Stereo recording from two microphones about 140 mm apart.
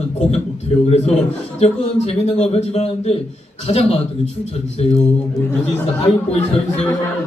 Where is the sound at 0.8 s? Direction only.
45° left (ahead or behind).